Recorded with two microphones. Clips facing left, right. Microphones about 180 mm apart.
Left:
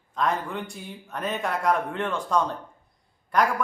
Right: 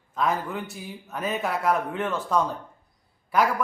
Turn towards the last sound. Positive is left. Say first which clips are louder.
# even
turn(degrees=-5)  # may be behind; listen again after turning